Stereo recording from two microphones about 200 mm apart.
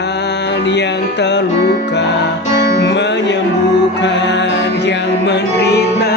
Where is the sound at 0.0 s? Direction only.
60° left (ahead or behind).